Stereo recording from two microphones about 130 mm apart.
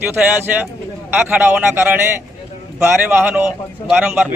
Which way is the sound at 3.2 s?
15° right (ahead or behind).